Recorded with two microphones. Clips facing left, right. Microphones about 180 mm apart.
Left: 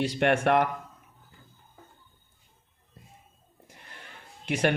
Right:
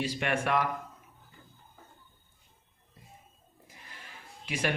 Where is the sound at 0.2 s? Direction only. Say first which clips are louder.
Left 8 dB; 60° left (ahead or behind).